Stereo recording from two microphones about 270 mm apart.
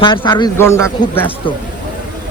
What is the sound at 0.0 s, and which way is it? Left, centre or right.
A man's voice, centre.